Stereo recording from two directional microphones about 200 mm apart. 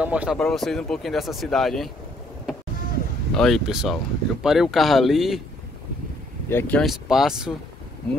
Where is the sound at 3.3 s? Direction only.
Centre (ahead or behind).